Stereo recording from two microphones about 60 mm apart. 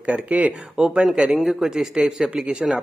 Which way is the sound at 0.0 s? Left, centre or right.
Right.